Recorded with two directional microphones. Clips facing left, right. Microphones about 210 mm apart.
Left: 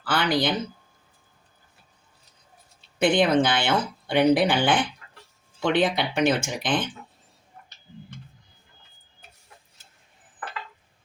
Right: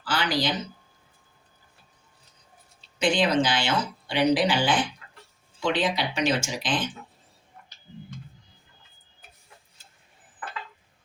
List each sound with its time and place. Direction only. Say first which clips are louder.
0.0 s speech: left 3 dB; 60° left (ahead or behind)
3.0 s speech: left 3 dB; 55° left (ahead or behind)